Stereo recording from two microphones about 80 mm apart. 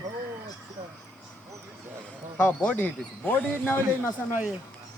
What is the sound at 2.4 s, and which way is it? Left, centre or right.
A man's voice, left.